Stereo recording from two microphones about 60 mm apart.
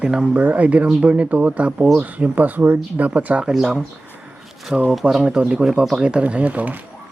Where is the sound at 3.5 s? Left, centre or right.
Centre.